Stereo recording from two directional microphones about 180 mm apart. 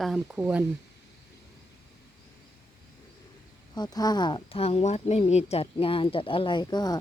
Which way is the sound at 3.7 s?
20° left (ahead or behind).